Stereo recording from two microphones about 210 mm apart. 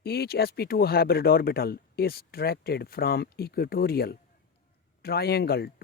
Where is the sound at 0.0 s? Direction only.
50° left (ahead or behind).